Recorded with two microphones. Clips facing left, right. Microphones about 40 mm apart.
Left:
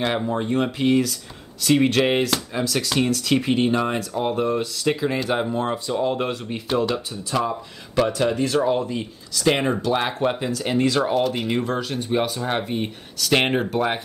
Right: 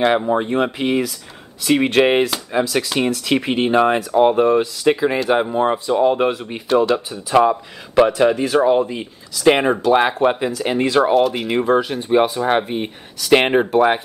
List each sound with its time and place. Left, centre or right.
0.0 s speech: centre
7.3 s speech: right
11.1 s speech: centre
11.5 s speech: right